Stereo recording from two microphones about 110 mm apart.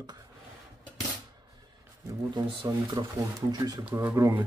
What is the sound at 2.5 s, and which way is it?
Speech, 45° right (ahead or behind).